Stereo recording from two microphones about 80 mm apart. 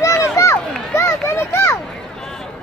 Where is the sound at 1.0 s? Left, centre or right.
Left.